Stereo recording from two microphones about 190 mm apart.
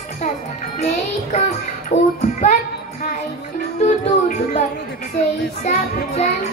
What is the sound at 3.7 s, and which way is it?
Music, 40° left (ahead or behind).